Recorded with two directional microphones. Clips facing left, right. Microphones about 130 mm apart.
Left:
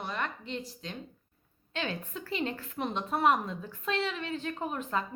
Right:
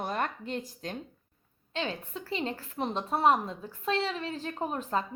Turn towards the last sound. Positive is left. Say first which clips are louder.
# right 2 dB
turn(degrees=-35)  # may be behind; listen again after turning